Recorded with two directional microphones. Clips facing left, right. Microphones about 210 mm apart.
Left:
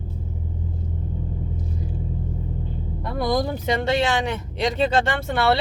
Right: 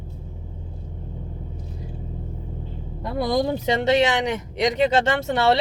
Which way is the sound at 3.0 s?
25° right (ahead or behind).